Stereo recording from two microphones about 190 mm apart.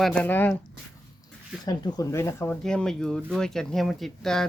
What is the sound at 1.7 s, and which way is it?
Speech, 20° left (ahead or behind).